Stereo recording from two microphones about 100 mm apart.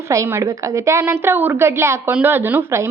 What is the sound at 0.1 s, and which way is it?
A woman's voice, 30° right (ahead or behind).